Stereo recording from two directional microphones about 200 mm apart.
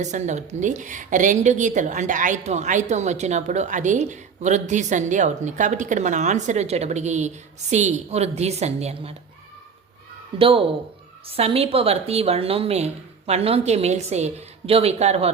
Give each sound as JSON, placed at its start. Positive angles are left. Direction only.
{"t": 0.0, "sound": "a woman's voice", "side_deg": -35}
{"t": 10.3, "sound": "a woman's voice", "side_deg": -25}